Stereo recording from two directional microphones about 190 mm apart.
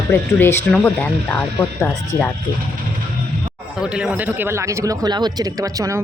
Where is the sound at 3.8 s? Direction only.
5° right (ahead or behind).